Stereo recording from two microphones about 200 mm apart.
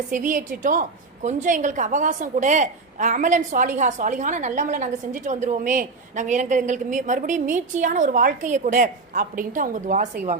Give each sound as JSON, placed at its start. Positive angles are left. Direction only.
{"t": 0.1, "sound": "a woman's voice", "side_deg": -40}